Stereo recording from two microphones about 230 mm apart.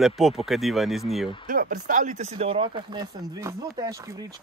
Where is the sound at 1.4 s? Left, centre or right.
Right.